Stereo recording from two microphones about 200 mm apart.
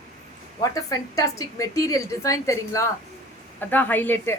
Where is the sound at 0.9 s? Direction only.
15° left (ahead or behind).